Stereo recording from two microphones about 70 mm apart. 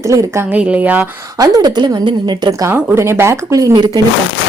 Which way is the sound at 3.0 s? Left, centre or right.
Right.